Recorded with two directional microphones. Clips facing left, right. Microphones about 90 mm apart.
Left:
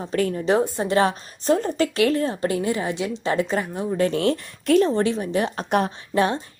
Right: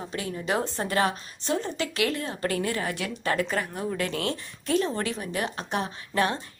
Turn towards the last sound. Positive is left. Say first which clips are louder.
# left 5 dB
turn(degrees=25)  # may be behind; listen again after turning